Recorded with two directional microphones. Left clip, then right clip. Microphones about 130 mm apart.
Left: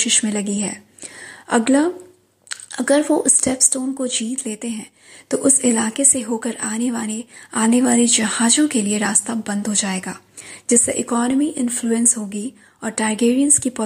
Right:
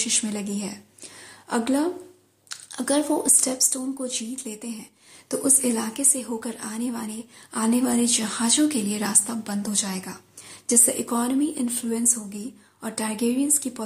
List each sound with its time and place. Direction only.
0.0 s a woman's voice: 35° left (ahead or behind)
10.7 s speech: 25° left (ahead or behind)
11.8 s a woman's voice: 40° left (ahead or behind)